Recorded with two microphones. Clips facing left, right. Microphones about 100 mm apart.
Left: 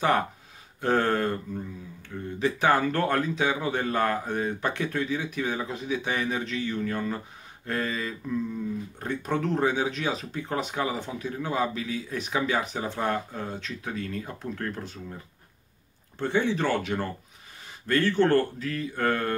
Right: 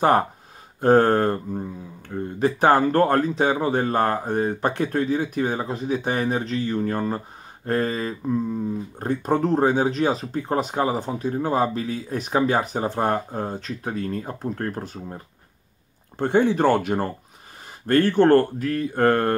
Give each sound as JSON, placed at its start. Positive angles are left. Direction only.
{"t": 0.7, "sound": "speech", "side_deg": -40}